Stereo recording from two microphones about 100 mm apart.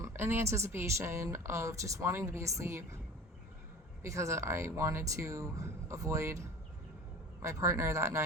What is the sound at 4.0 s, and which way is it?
A woman's voice, 30° right (ahead or behind).